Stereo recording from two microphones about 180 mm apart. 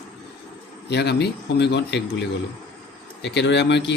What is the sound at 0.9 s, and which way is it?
Speech, 65° left (ahead or behind).